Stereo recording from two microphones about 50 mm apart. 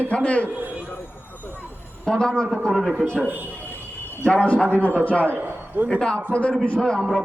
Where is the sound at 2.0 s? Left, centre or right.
Centre.